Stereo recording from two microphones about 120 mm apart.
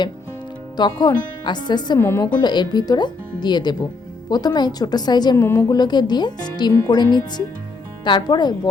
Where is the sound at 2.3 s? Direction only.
40° left (ahead or behind).